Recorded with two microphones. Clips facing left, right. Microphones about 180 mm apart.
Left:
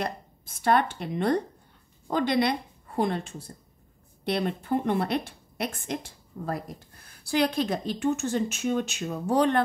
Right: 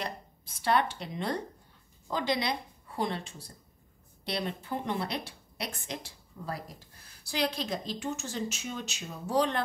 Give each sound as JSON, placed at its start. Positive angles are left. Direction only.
{"t": 0.0, "sound": "a woman's voice", "side_deg": 50}